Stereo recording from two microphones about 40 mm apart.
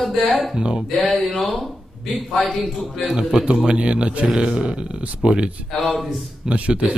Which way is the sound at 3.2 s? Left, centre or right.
Right.